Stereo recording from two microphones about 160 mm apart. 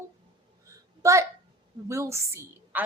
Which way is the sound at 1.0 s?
20° right (ahead or behind).